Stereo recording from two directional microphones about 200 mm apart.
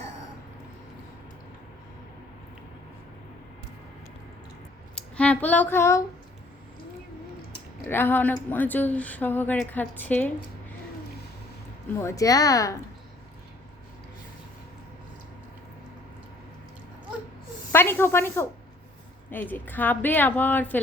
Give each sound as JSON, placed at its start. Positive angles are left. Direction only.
{"t": 4.9, "sound": "speech", "side_deg": 5}
{"t": 7.9, "sound": "speech", "side_deg": 10}
{"t": 11.9, "sound": "speech", "side_deg": 15}
{"t": 17.7, "sound": "speech", "side_deg": 10}